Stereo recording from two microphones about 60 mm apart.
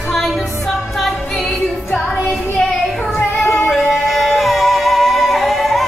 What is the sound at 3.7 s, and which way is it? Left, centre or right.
Music, centre.